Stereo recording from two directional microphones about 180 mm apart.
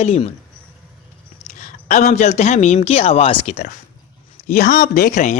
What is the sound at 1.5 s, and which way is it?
Speech, 45° left (ahead or behind).